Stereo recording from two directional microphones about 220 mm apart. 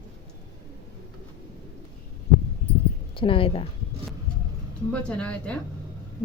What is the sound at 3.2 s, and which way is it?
Speech, 25° left (ahead or behind).